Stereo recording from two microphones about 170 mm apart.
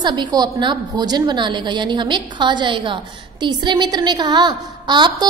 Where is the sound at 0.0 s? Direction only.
25° right (ahead or behind).